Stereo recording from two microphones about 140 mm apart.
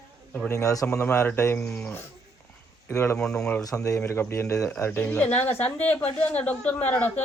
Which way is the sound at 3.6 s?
20° left (ahead or behind).